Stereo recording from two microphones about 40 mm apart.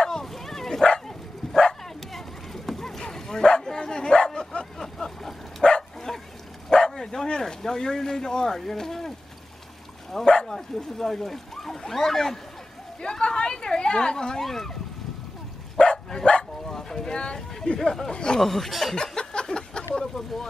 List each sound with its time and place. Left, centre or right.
0.0 s bow-wow: centre
4.7 s vehicle: centre
5.6 s bow-wow: left
6.1 s dog: centre
10.1 s speech: centre
15.8 s dog: centre
16.6 s a sound: centre; by 17.8 s left
18.1 s speech: centre
18.4 s speech: centre
18.9 s a sound: centre